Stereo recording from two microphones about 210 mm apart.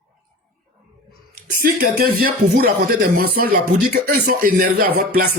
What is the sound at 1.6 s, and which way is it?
Speech, 40° right (ahead or behind).